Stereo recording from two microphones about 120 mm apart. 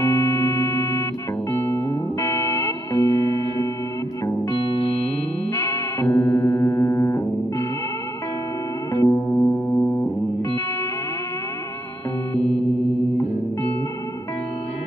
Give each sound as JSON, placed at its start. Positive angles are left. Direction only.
{"t": 0.0, "sound": "organ", "side_deg": 25}
{"t": 1.5, "sound": "music", "side_deg": 20}
{"t": 5.5, "sound": "music", "side_deg": 25}
{"t": 8.9, "sound": "music", "side_deg": 25}